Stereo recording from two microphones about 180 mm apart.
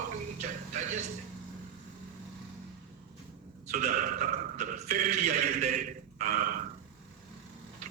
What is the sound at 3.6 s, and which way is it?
A man's voice, 45° right (ahead or behind).